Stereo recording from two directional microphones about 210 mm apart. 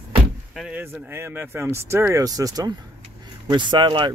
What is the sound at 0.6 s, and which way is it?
Speech, 5° right (ahead or behind).